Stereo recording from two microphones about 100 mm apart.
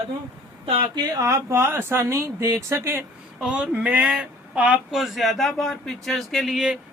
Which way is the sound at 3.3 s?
10° right (ahead or behind).